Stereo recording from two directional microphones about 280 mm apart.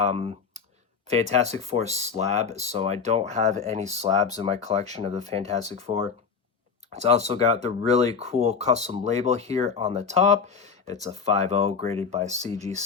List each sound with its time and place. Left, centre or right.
0.0 s speech: right
12.5 s speech: centre